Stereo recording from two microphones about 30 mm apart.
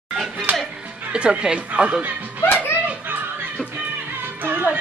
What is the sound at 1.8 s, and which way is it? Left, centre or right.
Speech, right.